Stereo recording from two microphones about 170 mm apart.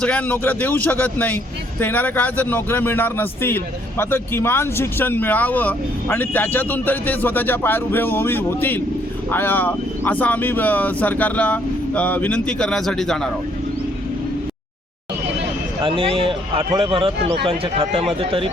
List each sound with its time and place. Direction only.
0.0 s a man's voice: 10° left (ahead or behind)
15.8 s speech: 30° right (ahead or behind)